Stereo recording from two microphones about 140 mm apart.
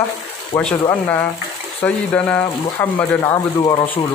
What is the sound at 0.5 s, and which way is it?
Speech, 20° left (ahead or behind).